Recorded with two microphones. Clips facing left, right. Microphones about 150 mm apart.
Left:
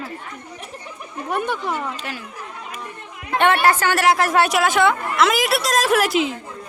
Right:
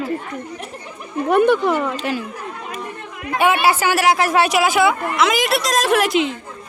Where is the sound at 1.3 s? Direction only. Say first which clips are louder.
Right 9 dB; 80° right.